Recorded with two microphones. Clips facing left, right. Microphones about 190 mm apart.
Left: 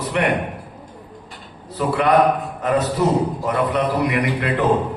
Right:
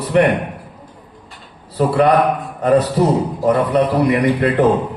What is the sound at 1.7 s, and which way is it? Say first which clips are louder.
A man's voice: right 3 dB; 35° right (ahead or behind).